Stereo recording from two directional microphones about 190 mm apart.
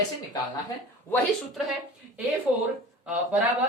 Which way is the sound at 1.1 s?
Centre (ahead or behind).